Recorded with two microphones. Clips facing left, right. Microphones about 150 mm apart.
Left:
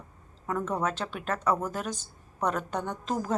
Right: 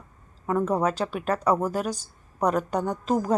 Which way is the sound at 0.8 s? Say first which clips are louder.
Right 6 dB; 10° right (ahead or behind).